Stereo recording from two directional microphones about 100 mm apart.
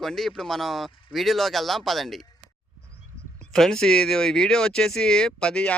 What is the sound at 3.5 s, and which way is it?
Speech, 5° left (ahead or behind).